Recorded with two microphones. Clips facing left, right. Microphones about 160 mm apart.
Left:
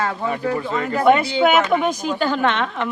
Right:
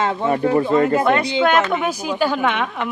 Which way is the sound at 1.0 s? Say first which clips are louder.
Left 2 dB; 5° left (ahead or behind).